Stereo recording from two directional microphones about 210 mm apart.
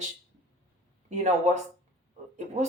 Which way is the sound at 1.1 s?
35° right (ahead or behind).